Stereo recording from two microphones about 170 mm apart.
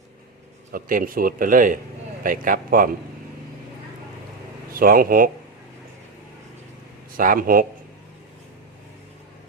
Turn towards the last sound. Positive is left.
turn(degrees=-55)  # may be behind; listen again after turning